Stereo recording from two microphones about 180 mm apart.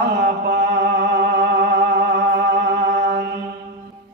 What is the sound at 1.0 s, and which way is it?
Music, 65° right (ahead or behind).